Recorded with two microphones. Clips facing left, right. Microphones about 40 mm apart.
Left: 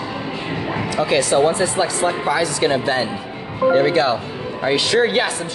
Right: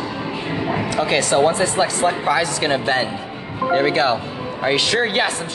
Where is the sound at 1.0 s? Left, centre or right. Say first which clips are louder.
Left 1 dB; right.